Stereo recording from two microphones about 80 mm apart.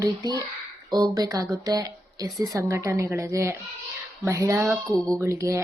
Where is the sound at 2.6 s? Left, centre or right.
Right.